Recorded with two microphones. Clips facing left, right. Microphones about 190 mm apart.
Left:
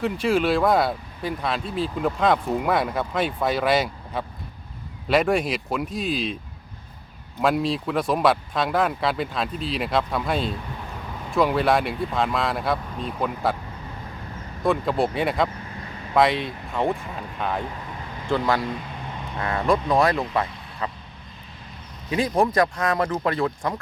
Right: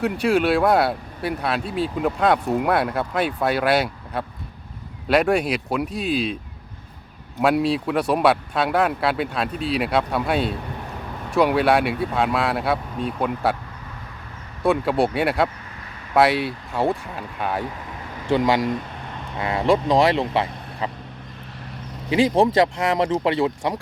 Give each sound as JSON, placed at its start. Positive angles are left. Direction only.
{"t": 0.0, "sound": "speech", "side_deg": 0}
{"t": 7.4, "sound": "speech", "side_deg": -5}
{"t": 14.6, "sound": "speech", "side_deg": -5}
{"t": 20.0, "sound": "speech", "side_deg": -30}
{"t": 20.8, "sound": "duck", "side_deg": -25}
{"t": 22.4, "sound": "speech", "side_deg": -20}